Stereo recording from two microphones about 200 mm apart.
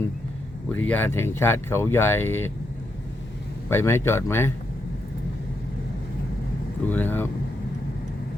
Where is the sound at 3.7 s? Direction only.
10° left (ahead or behind).